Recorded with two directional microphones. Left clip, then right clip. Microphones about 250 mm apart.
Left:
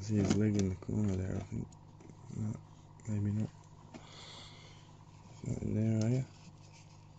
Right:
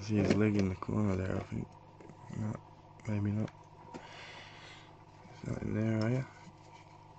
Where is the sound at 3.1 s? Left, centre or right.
Centre.